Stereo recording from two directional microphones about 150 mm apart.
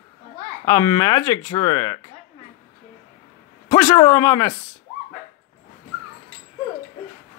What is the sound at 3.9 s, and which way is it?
Speech, 20° left (ahead or behind).